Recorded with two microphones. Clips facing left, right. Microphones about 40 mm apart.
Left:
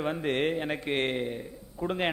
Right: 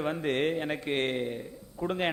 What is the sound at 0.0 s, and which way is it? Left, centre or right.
A man's voice, centre.